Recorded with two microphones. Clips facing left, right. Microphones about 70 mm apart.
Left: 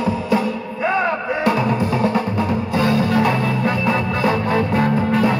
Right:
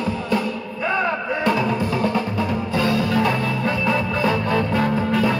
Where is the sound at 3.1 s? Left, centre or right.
Centre.